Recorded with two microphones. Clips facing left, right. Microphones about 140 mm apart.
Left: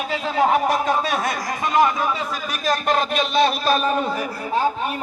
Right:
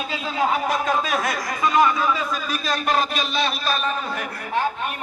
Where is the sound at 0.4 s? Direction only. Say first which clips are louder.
Left 4 dB; 40° left (ahead or behind).